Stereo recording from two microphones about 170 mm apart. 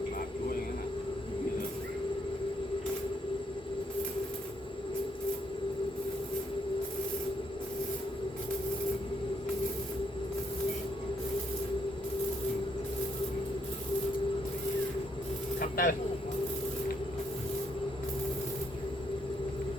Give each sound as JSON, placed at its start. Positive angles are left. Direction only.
{"t": 15.7, "sound": "vehicle", "side_deg": 55}